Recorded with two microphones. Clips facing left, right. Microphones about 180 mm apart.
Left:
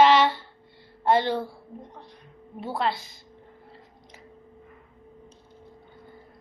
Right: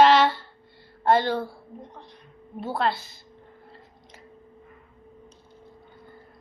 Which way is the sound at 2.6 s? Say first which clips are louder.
Right 2 dB; 15° left (ahead or behind).